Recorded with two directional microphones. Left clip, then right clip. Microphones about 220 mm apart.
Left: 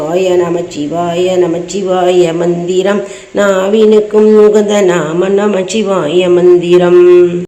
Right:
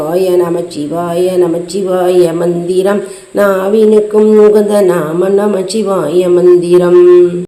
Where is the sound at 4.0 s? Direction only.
5° left (ahead or behind).